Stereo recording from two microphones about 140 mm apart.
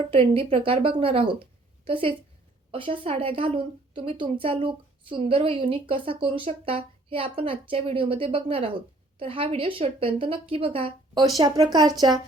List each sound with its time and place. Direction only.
0.1 s a woman's voice: 40° right (ahead or behind)